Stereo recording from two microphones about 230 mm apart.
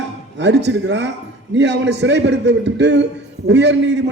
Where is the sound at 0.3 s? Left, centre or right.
Right.